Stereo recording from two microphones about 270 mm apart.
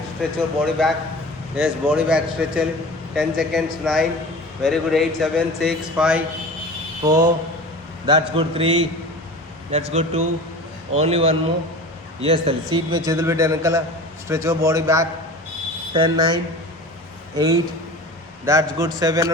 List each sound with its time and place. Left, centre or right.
0.2 s a man's voice: centre
8.0 s a man's voice: centre